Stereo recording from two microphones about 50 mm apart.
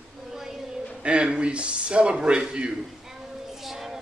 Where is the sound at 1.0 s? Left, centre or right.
Right.